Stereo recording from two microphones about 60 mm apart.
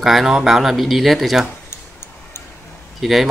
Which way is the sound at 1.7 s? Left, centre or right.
Left.